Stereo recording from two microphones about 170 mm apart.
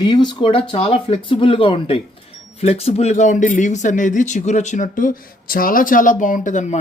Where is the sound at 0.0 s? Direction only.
25° left (ahead or behind).